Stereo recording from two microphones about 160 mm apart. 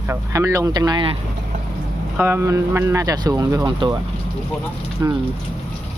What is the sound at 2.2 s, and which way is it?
Speech, 15° right (ahead or behind).